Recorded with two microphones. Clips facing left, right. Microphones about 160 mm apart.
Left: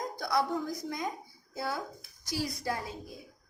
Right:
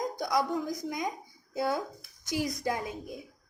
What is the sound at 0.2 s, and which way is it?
A woman's voice, 15° right (ahead or behind).